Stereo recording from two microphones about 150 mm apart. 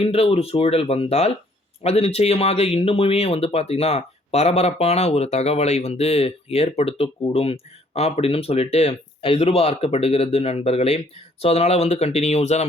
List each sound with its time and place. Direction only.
0.0 s speech: 40° left (ahead or behind)